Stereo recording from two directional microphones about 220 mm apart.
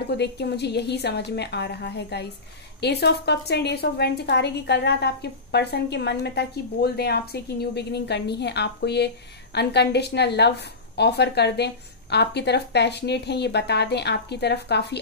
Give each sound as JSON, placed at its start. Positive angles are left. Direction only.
{"t": 0.2, "sound": "a woman's voice", "side_deg": 50}